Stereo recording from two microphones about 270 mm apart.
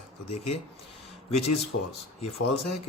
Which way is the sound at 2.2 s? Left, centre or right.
Left.